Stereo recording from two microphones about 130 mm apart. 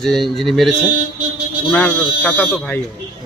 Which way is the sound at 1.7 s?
15° left (ahead or behind).